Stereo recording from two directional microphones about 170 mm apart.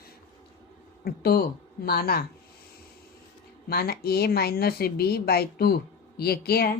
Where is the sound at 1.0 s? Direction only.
65° left (ahead or behind).